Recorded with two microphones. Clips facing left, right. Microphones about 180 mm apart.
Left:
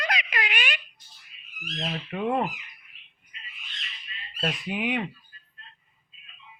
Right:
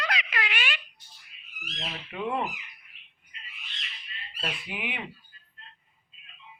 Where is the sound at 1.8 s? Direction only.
40° left (ahead or behind).